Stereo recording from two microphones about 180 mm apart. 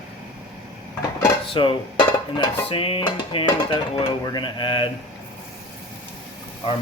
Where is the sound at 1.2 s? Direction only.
30° left (ahead or behind).